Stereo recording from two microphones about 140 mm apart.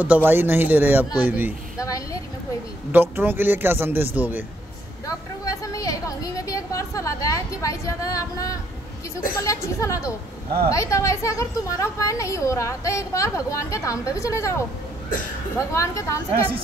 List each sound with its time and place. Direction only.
0.0 s a man's voice: 10° right (ahead or behind)
1.8 s a woman's voice: 25° left (ahead or behind)
2.9 s a man's voice: 15° right (ahead or behind)
5.0 s a woman's voice: 25° left (ahead or behind)
15.7 s a woman's voice: 20° left (ahead or behind)